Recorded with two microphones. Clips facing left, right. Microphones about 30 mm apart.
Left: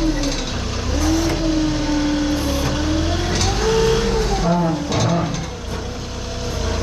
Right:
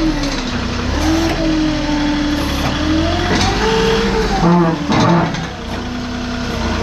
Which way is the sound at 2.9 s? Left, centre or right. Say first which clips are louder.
Right 6 dB; right.